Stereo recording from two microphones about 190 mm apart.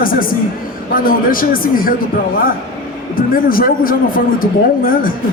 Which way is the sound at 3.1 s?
50° left (ahead or behind).